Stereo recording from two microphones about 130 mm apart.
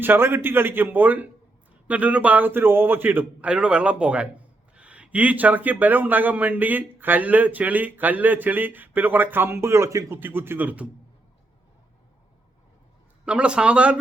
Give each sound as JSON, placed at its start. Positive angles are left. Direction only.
{"t": 0.0, "sound": "a man's voice", "side_deg": -15}
{"t": 13.2, "sound": "a man's voice", "side_deg": -10}